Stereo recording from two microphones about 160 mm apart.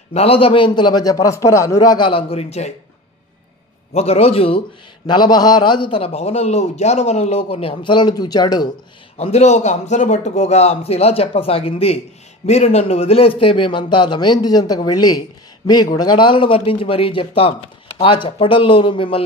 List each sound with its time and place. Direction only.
0.1 s a man's voice: 40° left (ahead or behind)
3.9 s a man's voice: 40° left (ahead or behind)
9.1 s a man's voice: 45° left (ahead or behind)